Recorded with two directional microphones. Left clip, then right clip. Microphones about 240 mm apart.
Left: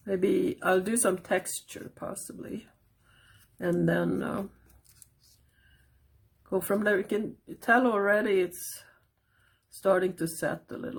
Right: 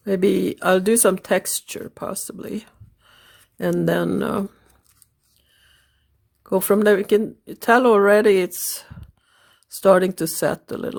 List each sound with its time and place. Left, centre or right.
0.0 s speech: right
6.5 s speech: right